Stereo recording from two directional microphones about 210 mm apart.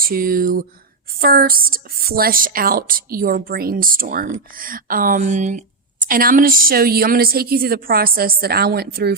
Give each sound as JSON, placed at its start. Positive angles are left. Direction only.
{"t": 0.0, "sound": "a woman's voice", "side_deg": -45}